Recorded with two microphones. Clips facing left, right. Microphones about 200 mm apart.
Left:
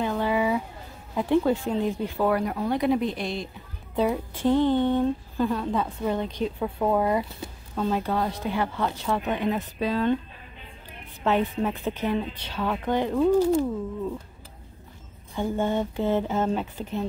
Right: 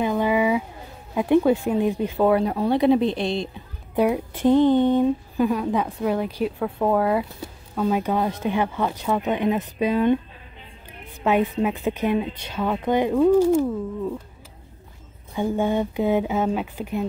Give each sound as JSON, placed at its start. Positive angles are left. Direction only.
{"t": 0.0, "sound": "a sound", "side_deg": -15}
{"t": 1.1, "sound": "speech", "side_deg": -15}
{"t": 3.9, "sound": "speech", "side_deg": -15}
{"t": 8.0, "sound": "speech", "side_deg": -20}
{"t": 11.2, "sound": "speech", "side_deg": -10}
{"t": 15.3, "sound": "speech", "side_deg": -15}